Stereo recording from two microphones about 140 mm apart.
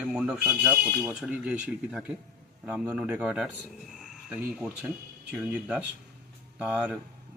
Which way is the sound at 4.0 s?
5° right (ahead or behind).